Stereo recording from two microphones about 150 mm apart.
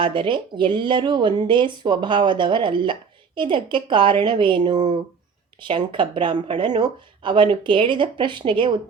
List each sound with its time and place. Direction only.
0.0 s speech: 35° right (ahead or behind)
5.6 s speech: 35° right (ahead or behind)